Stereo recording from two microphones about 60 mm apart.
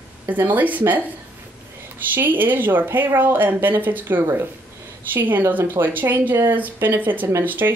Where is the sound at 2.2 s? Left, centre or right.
Right.